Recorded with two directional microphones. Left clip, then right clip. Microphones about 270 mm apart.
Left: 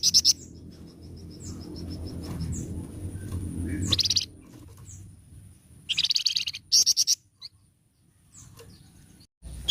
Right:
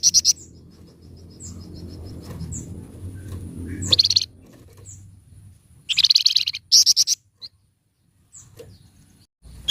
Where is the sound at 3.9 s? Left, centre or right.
Right.